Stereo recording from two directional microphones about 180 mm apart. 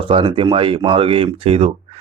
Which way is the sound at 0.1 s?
30° right (ahead or behind).